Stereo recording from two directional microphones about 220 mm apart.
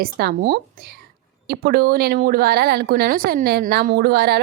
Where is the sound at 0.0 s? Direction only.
45° right (ahead or behind).